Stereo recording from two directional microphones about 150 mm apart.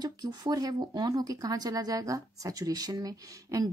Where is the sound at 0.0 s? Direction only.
25° right (ahead or behind).